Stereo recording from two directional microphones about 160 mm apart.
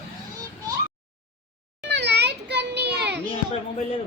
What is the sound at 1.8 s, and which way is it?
Children playing, 90° right.